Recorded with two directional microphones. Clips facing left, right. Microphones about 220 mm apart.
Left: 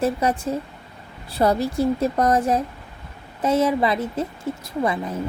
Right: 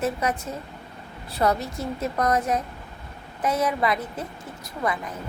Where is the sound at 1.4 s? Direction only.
30° left (ahead or behind).